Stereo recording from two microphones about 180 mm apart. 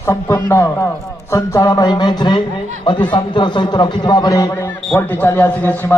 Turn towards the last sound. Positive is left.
turn(degrees=10)  # may be behind; listen again after turning